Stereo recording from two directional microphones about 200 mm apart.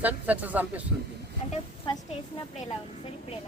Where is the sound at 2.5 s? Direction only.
35° left (ahead or behind).